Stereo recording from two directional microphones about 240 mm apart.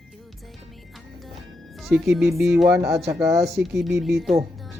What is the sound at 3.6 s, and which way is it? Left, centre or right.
Speech, centre.